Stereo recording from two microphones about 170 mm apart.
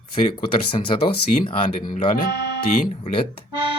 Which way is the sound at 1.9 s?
60° left (ahead or behind).